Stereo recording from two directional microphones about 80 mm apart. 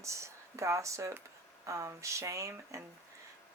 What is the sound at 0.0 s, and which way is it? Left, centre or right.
Speech, right.